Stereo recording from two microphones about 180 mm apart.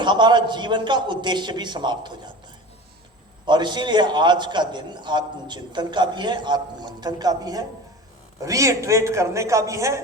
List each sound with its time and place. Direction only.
0.0 s a man's voice: 25° right (ahead or behind)
3.4 s a man's voice: 25° right (ahead or behind)